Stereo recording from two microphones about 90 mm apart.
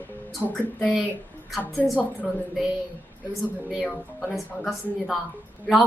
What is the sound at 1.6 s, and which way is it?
Speech, 20° left (ahead or behind).